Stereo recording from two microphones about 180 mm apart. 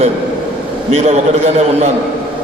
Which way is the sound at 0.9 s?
35° right (ahead or behind).